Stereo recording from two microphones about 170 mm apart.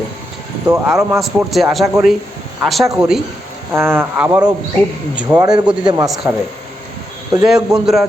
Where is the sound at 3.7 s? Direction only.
15° right (ahead or behind).